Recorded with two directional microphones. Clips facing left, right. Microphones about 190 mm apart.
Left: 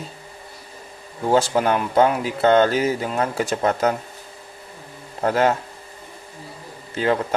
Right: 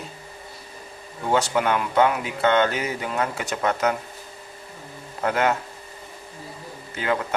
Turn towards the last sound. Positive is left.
turn(degrees=35)  # may be behind; listen again after turning